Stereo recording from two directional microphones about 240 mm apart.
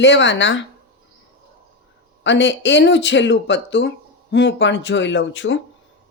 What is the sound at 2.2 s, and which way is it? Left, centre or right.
Speech, left.